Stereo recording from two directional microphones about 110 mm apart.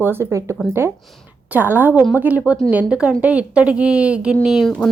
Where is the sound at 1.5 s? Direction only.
15° right (ahead or behind).